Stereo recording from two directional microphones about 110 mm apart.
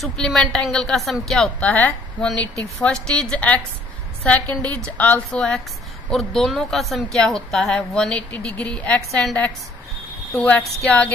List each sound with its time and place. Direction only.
0.0 s a woman's voice: 5° left (ahead or behind)